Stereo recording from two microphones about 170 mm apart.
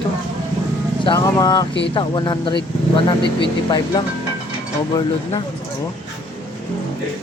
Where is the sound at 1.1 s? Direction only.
20° left (ahead or behind).